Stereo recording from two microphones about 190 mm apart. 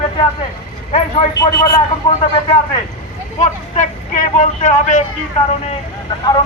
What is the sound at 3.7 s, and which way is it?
Speech, 40° left (ahead or behind).